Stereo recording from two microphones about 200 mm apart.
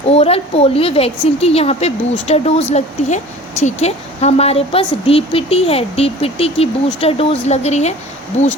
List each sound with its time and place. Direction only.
0.1 s a woman's voice: 30° left (ahead or behind)